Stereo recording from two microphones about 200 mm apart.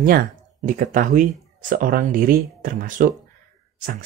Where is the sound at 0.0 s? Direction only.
50° right (ahead or behind).